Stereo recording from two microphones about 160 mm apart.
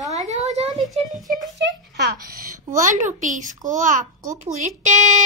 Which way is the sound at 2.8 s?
50° right (ahead or behind).